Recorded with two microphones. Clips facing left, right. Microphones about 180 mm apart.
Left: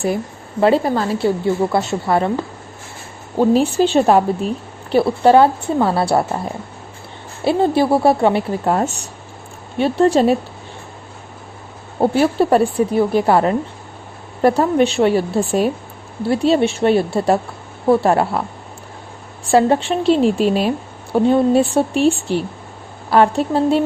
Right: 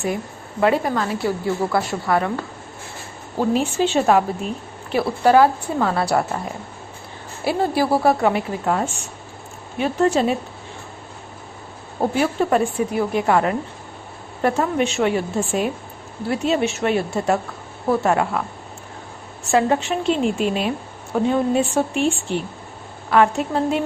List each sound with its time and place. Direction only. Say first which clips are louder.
0.6 s a woman's voice: left 4 dB; 30° left (ahead or behind)
3.3 s a woman's voice: left 6 dB; 35° left (ahead or behind)
7.4 s a woman's voice: left 5 dB; 25° left (ahead or behind)
11.9 s a woman's voice: left 5 dB; 35° left (ahead or behind)
19.5 s a woman's voice: left 4 dB; 35° left (ahead or behind)